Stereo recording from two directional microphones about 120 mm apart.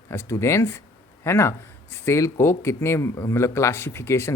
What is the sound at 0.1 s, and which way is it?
A man's voice, 20° left (ahead or behind).